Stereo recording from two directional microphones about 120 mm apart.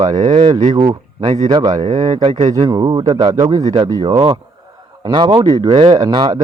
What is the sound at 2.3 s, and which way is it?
Speech, 85° right.